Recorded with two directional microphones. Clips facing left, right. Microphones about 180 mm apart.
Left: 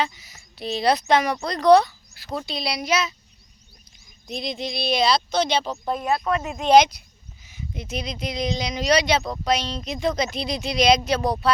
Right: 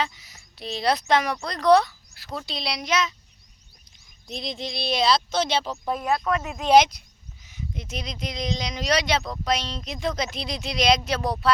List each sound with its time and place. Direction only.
0.0 s speech: centre (ahead or behind)
4.3 s speech: centre (ahead or behind)